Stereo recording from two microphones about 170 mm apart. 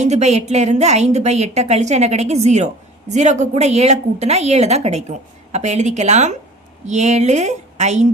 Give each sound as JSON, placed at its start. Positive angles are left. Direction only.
{"t": 0.0, "sound": "a woman's voice", "side_deg": -40}